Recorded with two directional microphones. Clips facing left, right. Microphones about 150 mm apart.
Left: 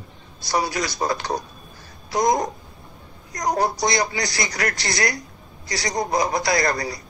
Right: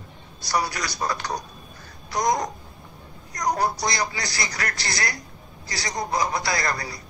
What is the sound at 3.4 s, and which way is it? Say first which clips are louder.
Speech: left 2 dB; 40° left (ahead or behind).